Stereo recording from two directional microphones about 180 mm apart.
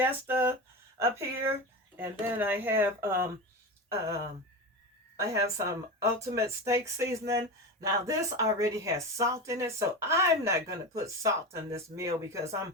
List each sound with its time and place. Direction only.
0.0 s speech: 10° right (ahead or behind)